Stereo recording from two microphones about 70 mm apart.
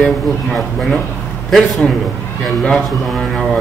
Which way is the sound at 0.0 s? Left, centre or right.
Centre.